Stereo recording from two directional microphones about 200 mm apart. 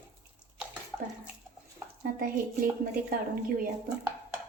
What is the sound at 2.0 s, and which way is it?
Speech, 45° right (ahead or behind).